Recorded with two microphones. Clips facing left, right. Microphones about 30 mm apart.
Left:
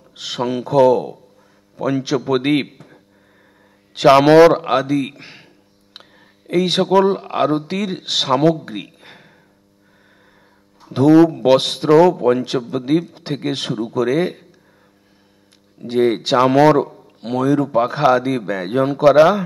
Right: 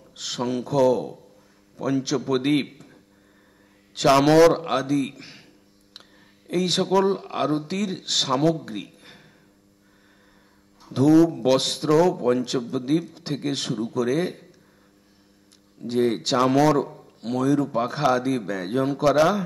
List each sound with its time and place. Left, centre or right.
0.1 s a man's voice: centre
5.9 s a sound: centre
6.9 s speech: left
8.7 s a sound: left
10.8 s speech: left
15.9 s speech: centre